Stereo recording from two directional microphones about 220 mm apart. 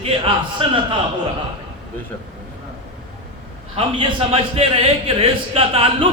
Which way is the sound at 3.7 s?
25° right (ahead or behind).